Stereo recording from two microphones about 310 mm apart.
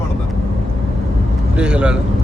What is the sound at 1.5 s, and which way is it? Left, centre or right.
Speech, centre.